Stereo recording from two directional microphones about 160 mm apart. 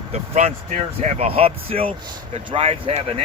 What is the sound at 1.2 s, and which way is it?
Speech, 35° right (ahead or behind).